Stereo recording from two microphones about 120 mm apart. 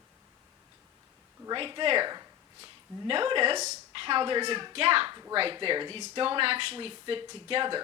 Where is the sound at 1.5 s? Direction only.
40° right (ahead or behind).